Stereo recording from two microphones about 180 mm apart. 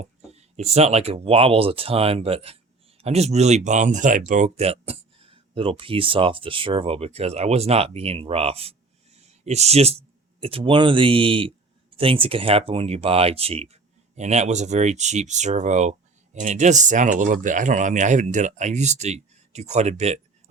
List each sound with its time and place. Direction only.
0.0 s speech: 35° right (ahead or behind)